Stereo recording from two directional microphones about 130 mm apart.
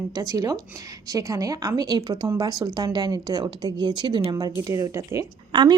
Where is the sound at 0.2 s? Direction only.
30° right (ahead or behind).